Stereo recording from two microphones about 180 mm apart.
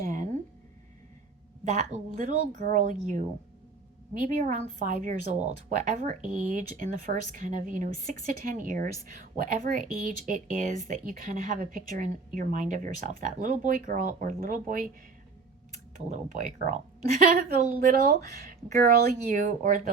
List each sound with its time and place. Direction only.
0.0 s a sound: 50° right (ahead or behind)
1.6 s a woman's voice: 40° right (ahead or behind)
16.0 s a woman's voice: 40° right (ahead or behind)